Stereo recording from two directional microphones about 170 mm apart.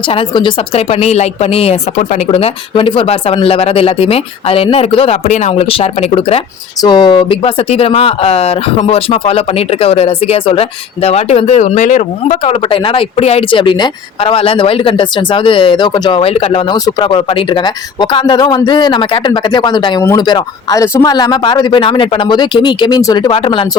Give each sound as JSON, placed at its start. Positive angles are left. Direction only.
{"t": 0.1, "sound": "speech", "side_deg": 30}